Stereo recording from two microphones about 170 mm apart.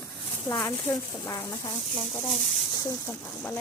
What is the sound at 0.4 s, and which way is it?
Speech, 20° left (ahead or behind).